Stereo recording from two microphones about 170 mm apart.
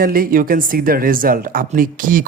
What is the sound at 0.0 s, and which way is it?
Speech, 55° right (ahead or behind).